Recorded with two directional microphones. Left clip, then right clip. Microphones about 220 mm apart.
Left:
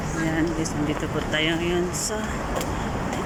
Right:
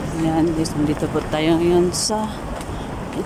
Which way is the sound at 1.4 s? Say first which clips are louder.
Right 7 dB; 20° right (ahead or behind).